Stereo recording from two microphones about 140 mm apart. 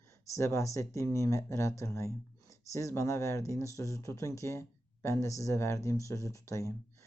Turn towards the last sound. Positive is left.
turn(degrees=20)  # may be behind; listen again after turning